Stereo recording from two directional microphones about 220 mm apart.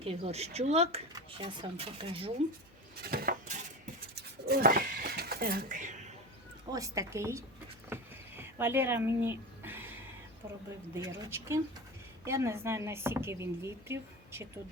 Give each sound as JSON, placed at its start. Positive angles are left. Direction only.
{"t": 0.0, "sound": "speech", "side_deg": -25}
{"t": 2.9, "sound": "coin", "side_deg": -45}
{"t": 4.1, "sound": "a sound", "side_deg": -45}
{"t": 6.7, "sound": "speech", "side_deg": -15}
{"t": 8.4, "sound": "a sound", "side_deg": -10}
{"t": 10.9, "sound": "speech", "side_deg": -15}